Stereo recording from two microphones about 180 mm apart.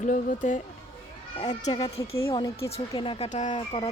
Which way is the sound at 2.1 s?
20° left (ahead or behind).